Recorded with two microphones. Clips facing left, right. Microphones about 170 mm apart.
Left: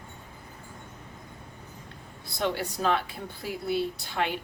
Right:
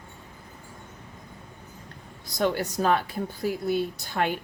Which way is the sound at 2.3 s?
45° right (ahead or behind).